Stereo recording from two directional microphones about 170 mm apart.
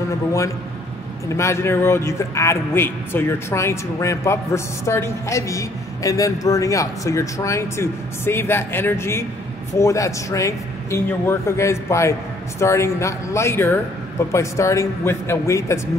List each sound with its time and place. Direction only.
1.3 s a man's voice: 15° left (ahead or behind)